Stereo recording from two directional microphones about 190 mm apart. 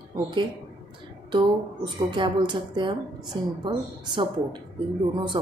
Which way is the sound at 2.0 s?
25° right (ahead or behind).